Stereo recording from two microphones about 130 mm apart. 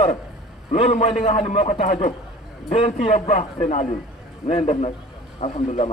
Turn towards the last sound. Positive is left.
turn(degrees=55)  # may be behind; listen again after turning